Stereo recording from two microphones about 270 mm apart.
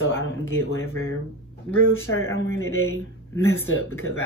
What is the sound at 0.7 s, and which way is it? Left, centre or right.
Speech, left.